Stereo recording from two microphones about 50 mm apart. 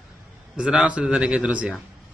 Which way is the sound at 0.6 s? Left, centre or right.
Right.